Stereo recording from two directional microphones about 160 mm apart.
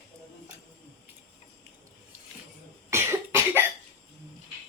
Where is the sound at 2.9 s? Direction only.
15° right (ahead or behind).